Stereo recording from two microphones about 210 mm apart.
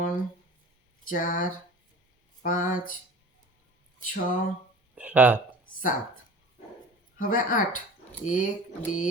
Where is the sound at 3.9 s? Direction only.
40° left (ahead or behind).